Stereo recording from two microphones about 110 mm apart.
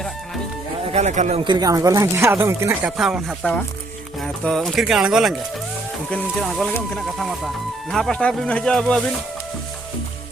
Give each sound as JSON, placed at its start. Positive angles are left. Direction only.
{"t": 0.9, "sound": "a man's voice", "side_deg": -90}
{"t": 1.5, "sound": "speech", "side_deg": -35}
{"t": 2.8, "sound": "speech", "side_deg": -5}
{"t": 6.4, "sound": "speech", "side_deg": 0}